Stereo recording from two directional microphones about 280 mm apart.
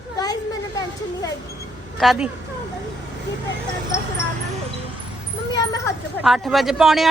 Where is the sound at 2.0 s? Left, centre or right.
Centre.